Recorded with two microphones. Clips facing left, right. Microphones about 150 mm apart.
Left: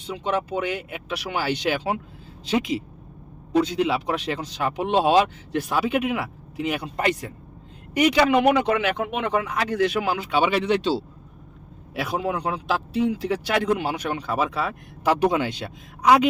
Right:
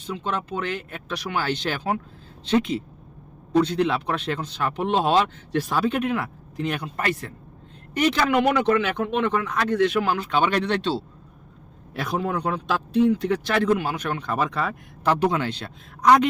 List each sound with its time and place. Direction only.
0.0 s speech: 15° left (ahead or behind)